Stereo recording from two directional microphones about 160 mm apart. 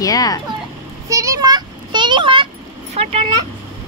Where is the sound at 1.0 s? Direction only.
20° right (ahead or behind).